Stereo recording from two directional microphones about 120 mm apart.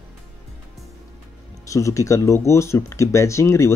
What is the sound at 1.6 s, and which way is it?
Speech, 25° left (ahead or behind).